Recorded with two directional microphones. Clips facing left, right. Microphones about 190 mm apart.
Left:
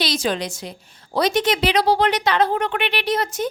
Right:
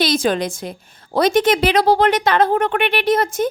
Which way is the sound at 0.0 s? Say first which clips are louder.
Right 5 dB; 50° right (ahead or behind).